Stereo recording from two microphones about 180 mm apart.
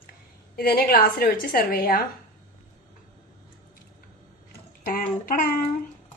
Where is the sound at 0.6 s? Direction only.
55° left (ahead or behind).